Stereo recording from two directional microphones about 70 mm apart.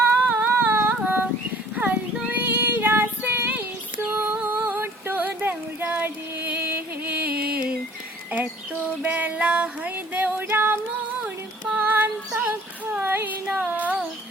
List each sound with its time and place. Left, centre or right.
0.0 s humming: right
1.7 s child singing: right
4.1 s music: right
4.6 s a sound: right
10.4 s music: right
11.7 s female singing: right